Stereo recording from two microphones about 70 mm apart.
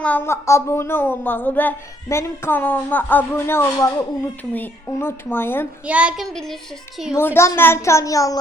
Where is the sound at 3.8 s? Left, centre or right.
Left.